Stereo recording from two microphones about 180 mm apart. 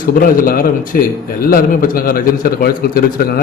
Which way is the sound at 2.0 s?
55° left (ahead or behind).